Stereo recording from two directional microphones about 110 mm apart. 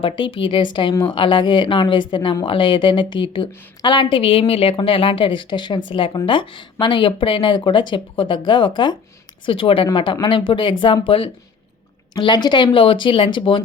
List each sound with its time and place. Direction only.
0.0 s speech: 55° left (ahead or behind)
12.1 s speech: 40° left (ahead or behind)